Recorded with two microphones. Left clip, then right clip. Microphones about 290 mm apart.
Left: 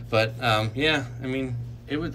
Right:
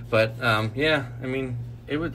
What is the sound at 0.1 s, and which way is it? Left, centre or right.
A man's voice, centre.